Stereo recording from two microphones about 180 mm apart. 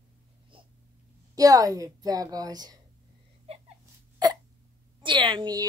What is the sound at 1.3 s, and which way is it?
A woman's voice, 20° right (ahead or behind).